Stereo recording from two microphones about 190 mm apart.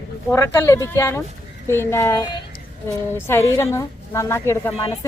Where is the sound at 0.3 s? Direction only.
15° left (ahead or behind).